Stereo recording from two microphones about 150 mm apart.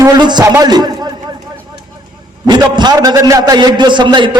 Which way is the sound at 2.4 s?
30° right (ahead or behind).